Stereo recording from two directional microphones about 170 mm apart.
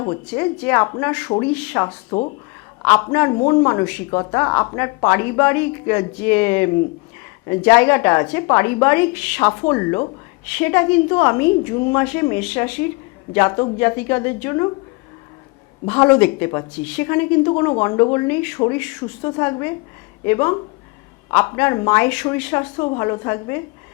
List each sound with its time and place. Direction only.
0.0 s a woman's voice: 20° left (ahead or behind)
2.8 s a woman's voice: 15° left (ahead or behind)
9.5 s a woman's voice: 20° left (ahead or behind)
15.9 s a woman's voice: 15° left (ahead or behind)